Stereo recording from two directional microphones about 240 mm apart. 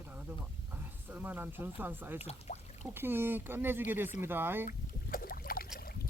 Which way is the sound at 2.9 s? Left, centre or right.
Centre.